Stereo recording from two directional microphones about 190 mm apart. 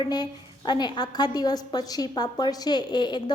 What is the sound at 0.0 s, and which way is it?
A woman's voice, 25° left (ahead or behind).